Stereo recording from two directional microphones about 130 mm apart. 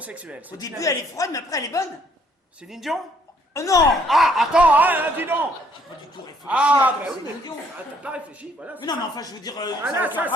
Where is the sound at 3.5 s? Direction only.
25° left (ahead or behind).